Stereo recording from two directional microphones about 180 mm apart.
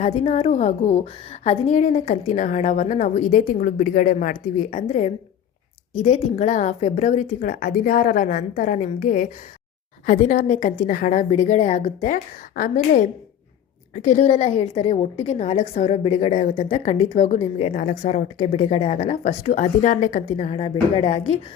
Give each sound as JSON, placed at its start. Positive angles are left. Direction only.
{"t": 0.0, "sound": "a woman's voice", "side_deg": 35}